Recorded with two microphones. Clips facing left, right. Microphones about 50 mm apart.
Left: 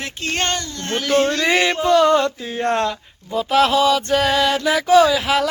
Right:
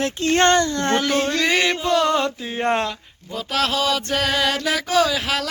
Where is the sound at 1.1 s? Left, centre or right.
Centre.